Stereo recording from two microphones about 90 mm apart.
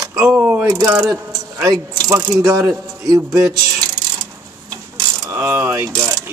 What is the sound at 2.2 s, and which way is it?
Speech, 40° right (ahead or behind).